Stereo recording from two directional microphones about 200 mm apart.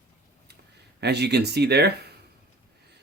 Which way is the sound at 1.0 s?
55° right (ahead or behind).